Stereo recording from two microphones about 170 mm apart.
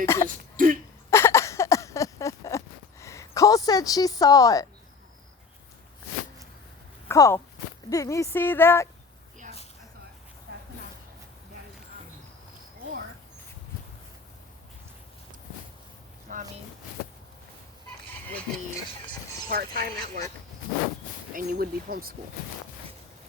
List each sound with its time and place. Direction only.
0.0 s a woman's voice: 15° left (ahead or behind)
0.5 s speech: 55° right (ahead or behind)
1.1 s a sound: 15° left (ahead or behind)
7.1 s a woman's voice: 15° left (ahead or behind)
16.3 s vehicle: 50° right (ahead or behind)
19.5 s speech: 60° right (ahead or behind)
21.3 s speech: 60° right (ahead or behind)